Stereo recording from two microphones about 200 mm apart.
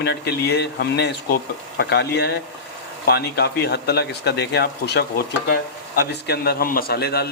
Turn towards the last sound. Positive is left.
turn(degrees=55)  # may be behind; listen again after turning